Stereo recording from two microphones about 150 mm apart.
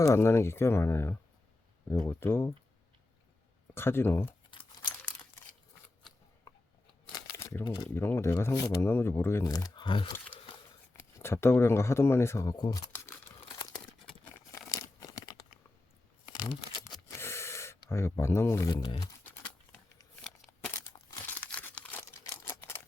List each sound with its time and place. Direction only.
0.0 s speech: 20° left (ahead or behind)
3.8 s speech: 15° left (ahead or behind)
7.9 s speech: 15° left (ahead or behind); by 10.1 s 35° left (ahead or behind)
11.2 s speech: 15° left (ahead or behind)
12.7 s crumpling: 15° left (ahead or behind)
13.5 s crumpling: 25° left (ahead or behind)
18.7 s speech: 30° left (ahead or behind)
20.2 s a sound: 5° left (ahead or behind)
21.2 s crumpling: 10° left (ahead or behind)
22.4 s camera: 15° left (ahead or behind)